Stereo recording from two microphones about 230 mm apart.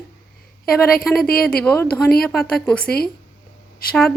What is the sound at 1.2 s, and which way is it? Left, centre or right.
Speech, left.